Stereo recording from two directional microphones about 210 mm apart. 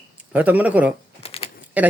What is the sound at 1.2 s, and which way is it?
Typing, 30° left (ahead or behind).